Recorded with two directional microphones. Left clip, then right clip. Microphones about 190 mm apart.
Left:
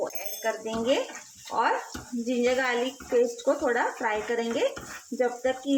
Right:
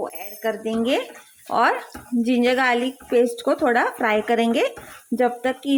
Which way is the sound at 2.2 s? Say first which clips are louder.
Right 6 dB; 60° right (ahead or behind).